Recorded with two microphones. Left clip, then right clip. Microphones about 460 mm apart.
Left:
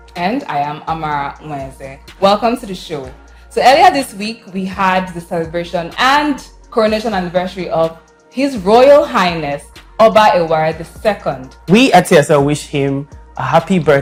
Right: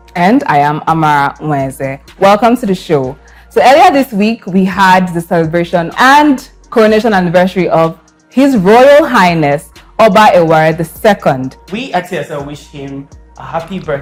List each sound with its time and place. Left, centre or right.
0.2 s a woman's voice: right
11.7 s speech: left
13.3 s speech: left